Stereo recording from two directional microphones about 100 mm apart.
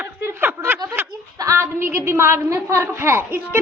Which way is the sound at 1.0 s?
20° right (ahead or behind).